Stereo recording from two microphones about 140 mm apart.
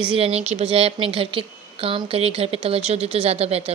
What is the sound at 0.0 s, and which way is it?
A woman's voice, 40° right (ahead or behind).